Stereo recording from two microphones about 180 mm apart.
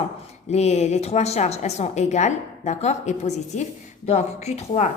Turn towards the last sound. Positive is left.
turn(degrees=35)  # may be behind; listen again after turning